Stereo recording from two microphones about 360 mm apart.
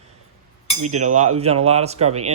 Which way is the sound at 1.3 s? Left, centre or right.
Centre.